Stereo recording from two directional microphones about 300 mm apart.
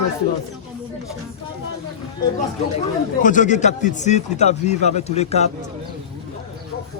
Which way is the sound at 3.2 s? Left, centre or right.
Left.